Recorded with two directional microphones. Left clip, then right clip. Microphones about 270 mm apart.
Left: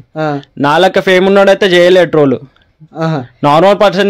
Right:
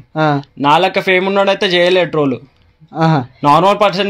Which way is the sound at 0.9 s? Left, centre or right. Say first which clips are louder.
Left 4 dB; left.